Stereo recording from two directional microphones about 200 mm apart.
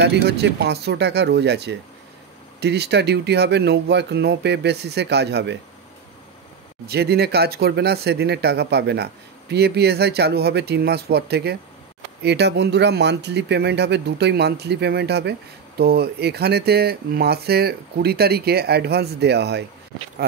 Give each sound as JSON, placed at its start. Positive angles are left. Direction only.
{"t": 0.0, "sound": "speech", "side_deg": -55}
{"t": 6.9, "sound": "speech", "side_deg": -55}